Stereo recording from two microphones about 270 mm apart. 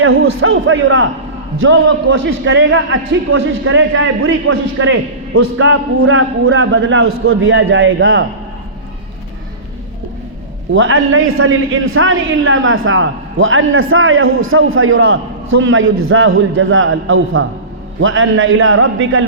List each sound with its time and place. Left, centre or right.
0.0 s a man's voice: right
10.8 s a man's voice: right